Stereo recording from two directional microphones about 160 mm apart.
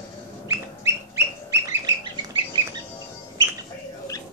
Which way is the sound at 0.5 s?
15° right (ahead or behind).